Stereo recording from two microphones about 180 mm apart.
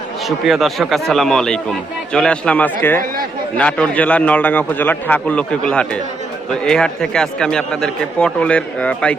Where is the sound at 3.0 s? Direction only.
50° right (ahead or behind).